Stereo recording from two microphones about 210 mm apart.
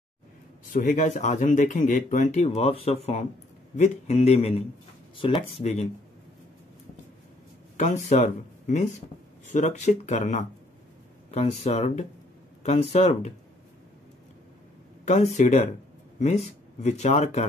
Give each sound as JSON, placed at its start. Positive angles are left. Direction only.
{"t": 0.7, "sound": "speech", "side_deg": 35}
{"t": 7.7, "sound": "speech", "side_deg": 35}
{"t": 15.0, "sound": "speech", "side_deg": 35}